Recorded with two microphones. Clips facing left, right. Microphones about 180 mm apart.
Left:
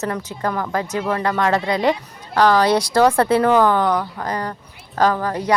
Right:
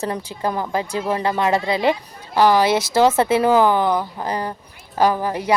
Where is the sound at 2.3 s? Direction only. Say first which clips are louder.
Even; 5° right (ahead or behind).